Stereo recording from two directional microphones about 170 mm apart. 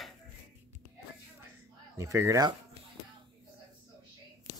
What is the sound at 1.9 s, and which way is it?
Speech, 15° right (ahead or behind).